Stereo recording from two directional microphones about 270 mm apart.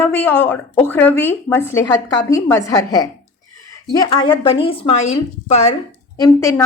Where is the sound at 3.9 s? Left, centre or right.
Centre.